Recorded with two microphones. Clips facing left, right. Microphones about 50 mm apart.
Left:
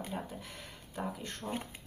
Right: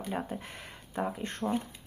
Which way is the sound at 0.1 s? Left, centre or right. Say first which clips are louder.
Right 5 dB; right.